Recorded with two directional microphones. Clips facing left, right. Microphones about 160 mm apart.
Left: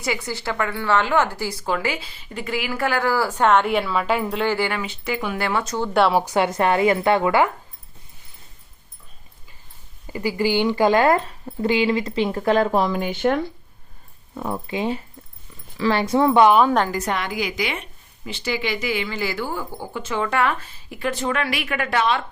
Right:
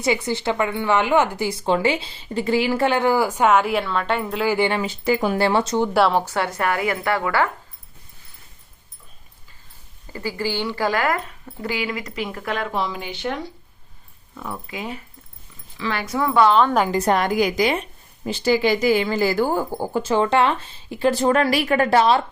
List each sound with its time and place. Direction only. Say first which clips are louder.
0.0 s speech: right 5 dB; 20° right (ahead or behind); by 4.4 s centre (ahead or behind)
4.4 s speech: right 5 dB; 20° right (ahead or behind)
4.8 s speech: right 6 dB; 35° right (ahead or behind)
5.9 s a woman's voice: left 2 dB; centre (ahead or behind)
6.1 s speech: left 3 dB; 15° left (ahead or behind)
10.1 s speech: left 4 dB; 15° left (ahead or behind); by 13.5 s 50° left (ahead or behind)
14.3 s speech: left 6 dB; 30° left (ahead or behind); by 16.7 s 10° left (ahead or behind)
16.9 s speech: right 6 dB; 35° right (ahead or behind)